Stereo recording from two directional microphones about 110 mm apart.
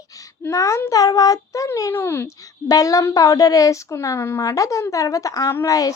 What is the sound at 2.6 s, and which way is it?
A woman's voice, 30° left (ahead or behind).